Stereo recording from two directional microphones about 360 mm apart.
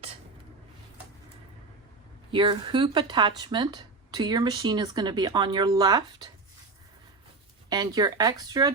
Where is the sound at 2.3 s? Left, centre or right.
Centre.